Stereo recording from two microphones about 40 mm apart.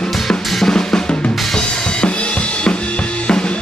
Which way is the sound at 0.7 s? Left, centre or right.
Centre.